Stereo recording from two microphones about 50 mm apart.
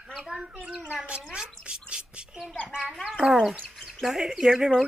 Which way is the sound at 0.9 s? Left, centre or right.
Right.